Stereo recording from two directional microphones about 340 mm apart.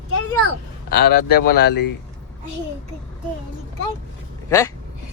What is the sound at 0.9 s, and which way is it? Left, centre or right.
Speech, left.